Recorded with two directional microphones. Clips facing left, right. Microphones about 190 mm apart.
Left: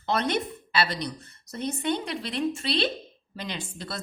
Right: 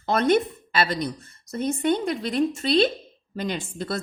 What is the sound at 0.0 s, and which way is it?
Speech, 50° right (ahead or behind).